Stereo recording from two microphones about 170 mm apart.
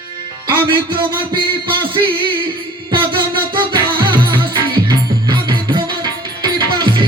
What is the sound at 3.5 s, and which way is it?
Music, 30° right (ahead or behind).